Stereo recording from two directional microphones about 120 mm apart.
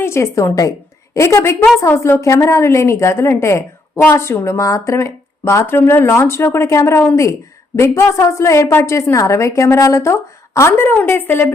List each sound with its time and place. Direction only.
0.0 s a woman's voice: 20° left (ahead or behind)